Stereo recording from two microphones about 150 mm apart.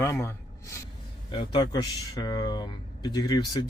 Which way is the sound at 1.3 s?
30° left (ahead or behind).